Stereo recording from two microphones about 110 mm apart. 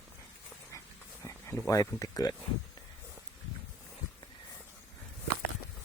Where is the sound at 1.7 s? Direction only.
35° left (ahead or behind).